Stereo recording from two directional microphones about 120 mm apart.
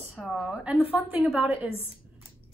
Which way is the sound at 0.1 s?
Centre (ahead or behind).